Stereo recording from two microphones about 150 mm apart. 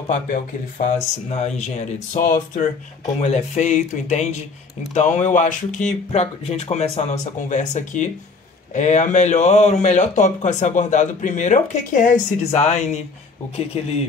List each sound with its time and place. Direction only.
0.1 s speech: 55° left (ahead or behind)